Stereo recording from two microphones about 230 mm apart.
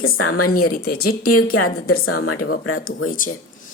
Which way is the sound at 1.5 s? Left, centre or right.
Left.